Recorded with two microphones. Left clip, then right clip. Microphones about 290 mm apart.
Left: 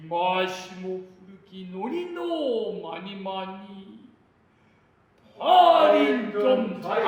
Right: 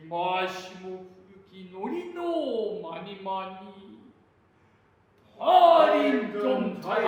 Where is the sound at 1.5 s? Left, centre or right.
Left.